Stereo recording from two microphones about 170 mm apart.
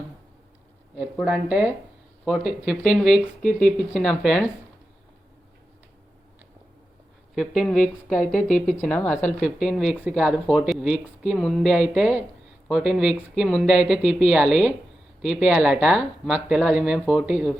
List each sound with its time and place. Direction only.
1.2 s speech: 5° right (ahead or behind)
7.3 s speech: 5° left (ahead or behind)
8.1 s a woman's voice: 50° left (ahead or behind)
8.7 s a woman's voice: 5° left (ahead or behind)